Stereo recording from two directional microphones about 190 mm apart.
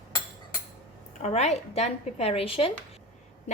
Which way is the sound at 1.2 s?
35° left (ahead or behind).